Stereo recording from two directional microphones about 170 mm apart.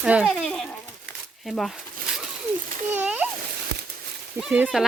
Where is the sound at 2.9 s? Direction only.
10° right (ahead or behind).